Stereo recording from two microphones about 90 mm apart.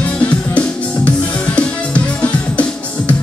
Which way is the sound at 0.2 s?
15° left (ahead or behind).